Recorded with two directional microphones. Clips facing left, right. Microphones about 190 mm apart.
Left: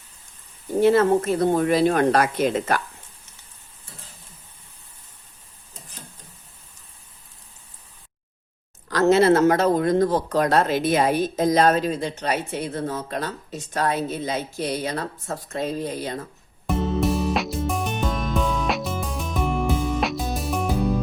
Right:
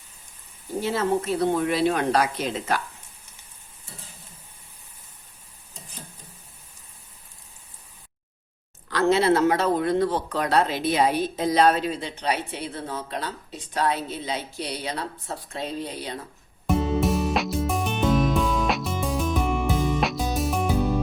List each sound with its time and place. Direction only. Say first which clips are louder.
0.8 s speech: left 7 dB; 55° left (ahead or behind)
8.9 s speech: left 4 dB; 45° left (ahead or behind)
16.6 s music: even; centre (ahead or behind)